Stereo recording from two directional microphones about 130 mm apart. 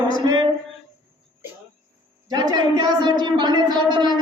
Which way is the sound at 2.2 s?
35° right (ahead or behind).